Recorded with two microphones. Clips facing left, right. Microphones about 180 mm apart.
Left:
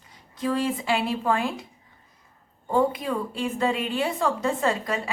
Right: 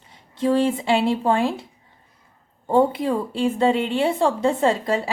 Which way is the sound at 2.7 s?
30° right (ahead or behind).